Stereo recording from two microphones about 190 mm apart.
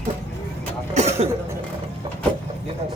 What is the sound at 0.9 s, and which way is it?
Cough, 35° right (ahead or behind).